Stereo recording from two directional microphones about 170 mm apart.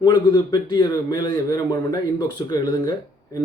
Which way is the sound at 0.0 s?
25° left (ahead or behind).